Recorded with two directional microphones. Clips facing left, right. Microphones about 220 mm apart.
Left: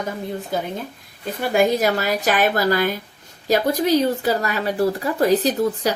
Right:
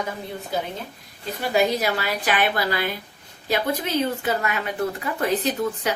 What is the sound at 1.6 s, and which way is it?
A woman's voice, 45° left (ahead or behind).